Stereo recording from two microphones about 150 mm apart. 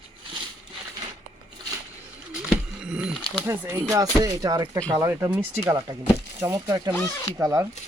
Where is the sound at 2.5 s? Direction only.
5° right (ahead or behind).